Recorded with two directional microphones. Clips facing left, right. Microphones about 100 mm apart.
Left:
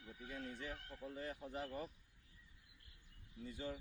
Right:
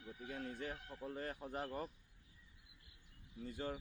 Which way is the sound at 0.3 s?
50° right (ahead or behind).